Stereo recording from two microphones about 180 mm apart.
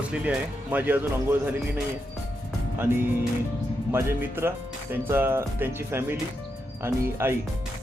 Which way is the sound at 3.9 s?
15° right (ahead or behind).